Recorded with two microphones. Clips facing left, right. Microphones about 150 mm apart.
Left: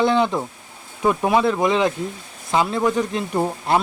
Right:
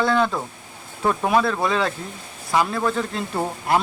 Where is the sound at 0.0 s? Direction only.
20° left (ahead or behind).